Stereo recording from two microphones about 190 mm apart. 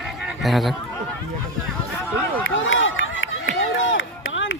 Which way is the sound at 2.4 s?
90° left.